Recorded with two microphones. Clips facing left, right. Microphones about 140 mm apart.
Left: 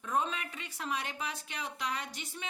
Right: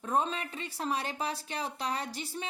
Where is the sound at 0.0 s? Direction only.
35° right (ahead or behind).